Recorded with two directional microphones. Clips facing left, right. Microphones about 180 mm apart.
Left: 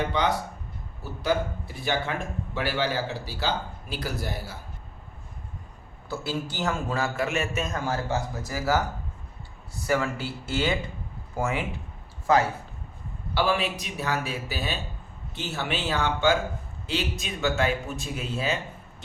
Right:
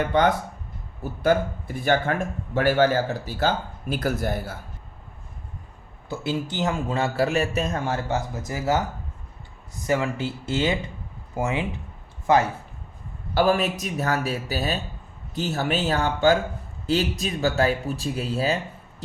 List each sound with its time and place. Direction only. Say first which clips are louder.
0.0 s a man's voice: right 5 dB; 50° right (ahead or behind)
6.1 s a man's voice: right 3 dB; 20° right (ahead or behind)
13.3 s a man's voice: right 5 dB; 45° right (ahead or behind)